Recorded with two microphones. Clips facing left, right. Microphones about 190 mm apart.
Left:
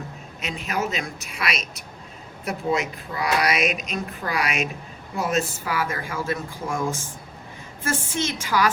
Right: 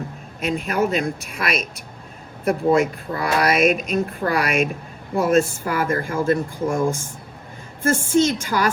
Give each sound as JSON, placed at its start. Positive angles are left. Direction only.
{"t": 0.4, "sound": "speech", "side_deg": -55}
{"t": 7.8, "sound": "speech", "side_deg": -55}